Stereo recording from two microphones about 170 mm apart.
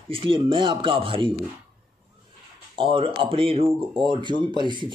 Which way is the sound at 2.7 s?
30° right (ahead or behind).